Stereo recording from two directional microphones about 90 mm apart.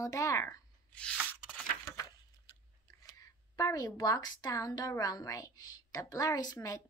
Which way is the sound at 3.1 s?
40° left (ahead or behind).